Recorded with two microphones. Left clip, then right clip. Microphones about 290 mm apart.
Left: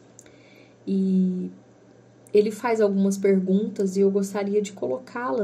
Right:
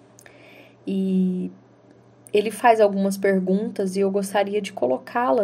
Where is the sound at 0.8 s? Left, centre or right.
Right.